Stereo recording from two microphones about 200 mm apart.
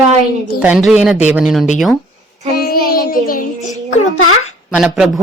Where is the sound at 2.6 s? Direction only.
50° left (ahead or behind).